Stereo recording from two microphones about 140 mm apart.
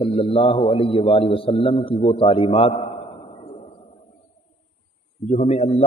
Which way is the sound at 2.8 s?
45° left (ahead or behind).